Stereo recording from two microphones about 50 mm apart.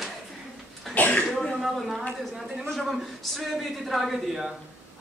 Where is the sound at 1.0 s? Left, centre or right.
Left.